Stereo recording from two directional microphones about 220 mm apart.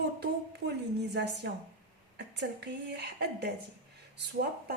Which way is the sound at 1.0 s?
50° right (ahead or behind).